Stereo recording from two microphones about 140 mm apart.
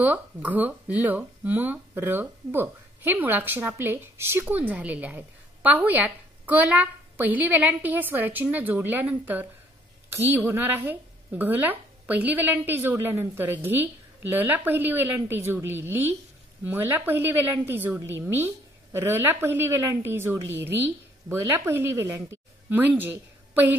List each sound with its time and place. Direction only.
0.0 s speech: 10° right (ahead or behind)